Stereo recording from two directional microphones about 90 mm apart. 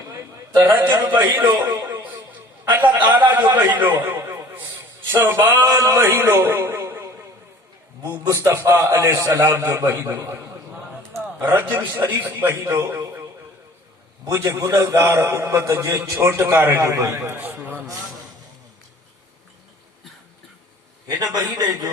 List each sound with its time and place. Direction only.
0.6 s a man's voice: 20° right (ahead or behind)
5.6 s a man's voice: 35° right (ahead or behind)
6.4 s a sound: 25° right (ahead or behind)
8.3 s a man's voice: 30° right (ahead or behind)
11.4 s a man's voice: 25° right (ahead or behind)
14.3 s a man's voice: 35° right (ahead or behind); by 17.8 s 20° right (ahead or behind)
21.2 s a man's voice: 45° right (ahead or behind)